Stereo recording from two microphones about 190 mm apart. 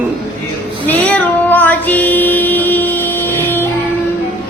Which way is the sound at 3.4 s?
10° left (ahead or behind).